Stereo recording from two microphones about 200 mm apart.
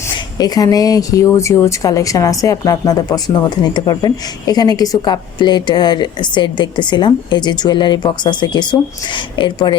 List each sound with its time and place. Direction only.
0.3 s a woman's voice: 20° left (ahead or behind)